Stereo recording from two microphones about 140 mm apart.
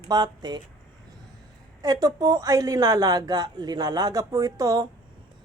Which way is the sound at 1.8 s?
25° right (ahead or behind).